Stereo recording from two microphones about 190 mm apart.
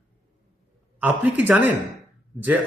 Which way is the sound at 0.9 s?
10° right (ahead or behind).